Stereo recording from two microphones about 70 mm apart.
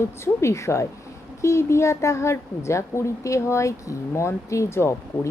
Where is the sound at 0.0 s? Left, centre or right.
Left.